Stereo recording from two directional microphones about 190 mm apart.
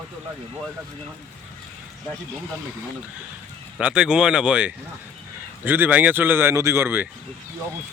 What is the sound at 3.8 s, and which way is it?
Speech, 5° right (ahead or behind).